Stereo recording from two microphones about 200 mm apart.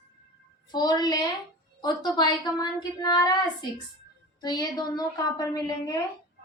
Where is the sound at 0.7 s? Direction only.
20° left (ahead or behind).